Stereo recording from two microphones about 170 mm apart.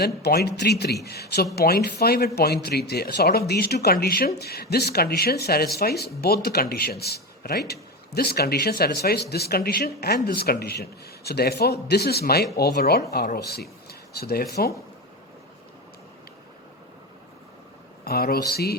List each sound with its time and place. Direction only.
0.0 s a man's voice: 70° left (ahead or behind)
18.0 s a man's voice: 65° left (ahead or behind)